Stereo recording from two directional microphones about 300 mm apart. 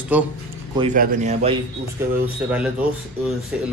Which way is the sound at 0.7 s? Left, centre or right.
Right.